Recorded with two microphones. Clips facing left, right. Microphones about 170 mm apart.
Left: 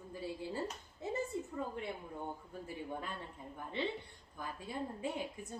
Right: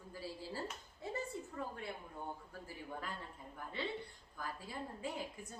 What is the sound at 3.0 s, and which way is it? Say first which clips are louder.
A woman's voice: left 2 dB; 20° left (ahead or behind).